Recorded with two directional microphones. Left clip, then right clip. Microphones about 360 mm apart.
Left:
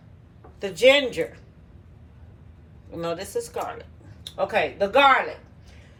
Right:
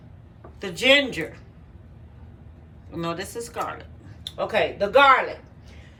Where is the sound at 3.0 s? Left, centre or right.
Centre.